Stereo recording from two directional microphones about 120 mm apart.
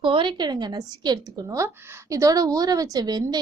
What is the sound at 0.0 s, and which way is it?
A woman's voice, 45° right (ahead or behind).